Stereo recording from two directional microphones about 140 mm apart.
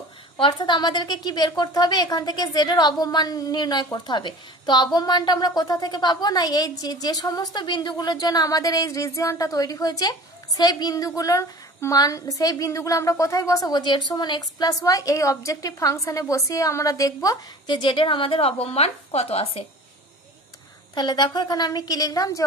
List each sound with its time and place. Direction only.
0.4 s a woman's voice: 30° left (ahead or behind)
20.9 s a woman's voice: 30° left (ahead or behind)